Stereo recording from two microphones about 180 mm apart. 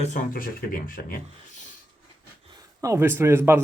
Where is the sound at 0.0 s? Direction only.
45° left (ahead or behind).